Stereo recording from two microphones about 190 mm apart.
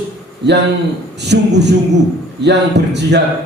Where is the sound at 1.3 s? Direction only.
65° right (ahead or behind).